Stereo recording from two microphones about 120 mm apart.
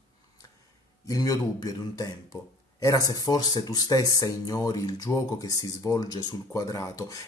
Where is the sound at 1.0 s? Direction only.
30° left (ahead or behind).